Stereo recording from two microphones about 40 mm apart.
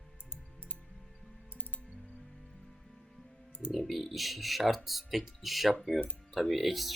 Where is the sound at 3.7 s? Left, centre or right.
Centre.